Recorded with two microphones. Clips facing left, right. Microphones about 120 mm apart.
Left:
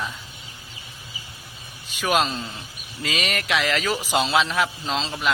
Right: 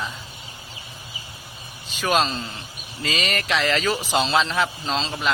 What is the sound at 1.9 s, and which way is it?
A man's voice, 10° left (ahead or behind).